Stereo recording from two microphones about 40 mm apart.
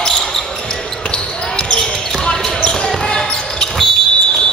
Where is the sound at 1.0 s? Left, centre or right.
Left.